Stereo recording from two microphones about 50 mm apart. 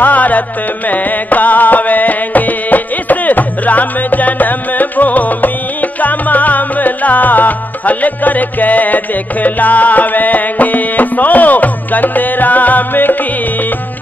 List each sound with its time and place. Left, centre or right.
0.0 s music: left